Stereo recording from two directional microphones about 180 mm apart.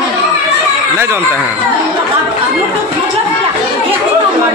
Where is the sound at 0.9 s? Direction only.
15° right (ahead or behind).